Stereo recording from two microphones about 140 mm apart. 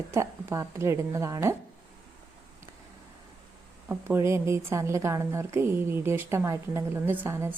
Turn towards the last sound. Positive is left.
turn(degrees=-15)  # may be behind; listen again after turning